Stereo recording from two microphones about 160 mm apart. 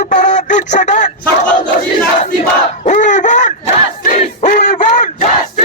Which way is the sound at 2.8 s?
50° left (ahead or behind).